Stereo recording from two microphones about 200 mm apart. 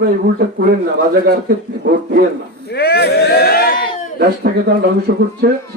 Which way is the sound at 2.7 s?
50° left (ahead or behind).